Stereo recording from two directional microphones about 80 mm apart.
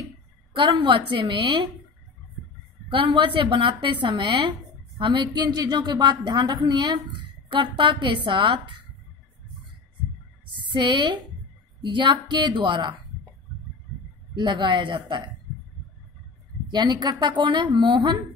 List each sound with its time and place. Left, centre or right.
0.5 s a woman's voice: right
2.9 s a woman's voice: right
4.2 s a woman's voice: right
7.4 s a woman's voice: right
10.5 s a woman's voice: right
11.8 s a woman's voice: right
14.3 s speech: right
16.7 s a woman's voice: right